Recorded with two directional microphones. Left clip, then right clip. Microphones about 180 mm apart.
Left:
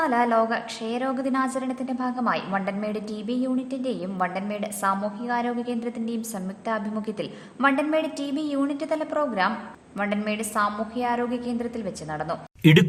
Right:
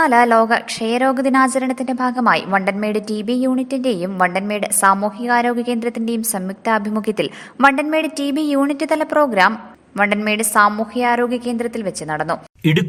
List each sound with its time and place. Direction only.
0.0 s a woman's voice: 40° right (ahead or behind)
12.6 s speech: centre (ahead or behind)